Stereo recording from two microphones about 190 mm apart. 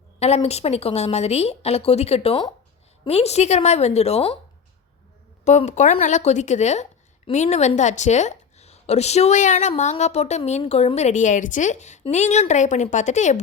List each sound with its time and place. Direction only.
0.2 s a woman's voice: 35° left (ahead or behind)
5.5 s a woman's voice: 35° left (ahead or behind)